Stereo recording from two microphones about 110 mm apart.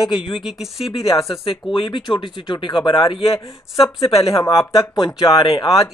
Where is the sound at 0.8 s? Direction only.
65° left (ahead or behind).